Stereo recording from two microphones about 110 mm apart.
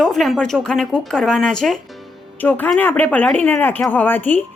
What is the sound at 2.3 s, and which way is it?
Speech, 15° left (ahead or behind).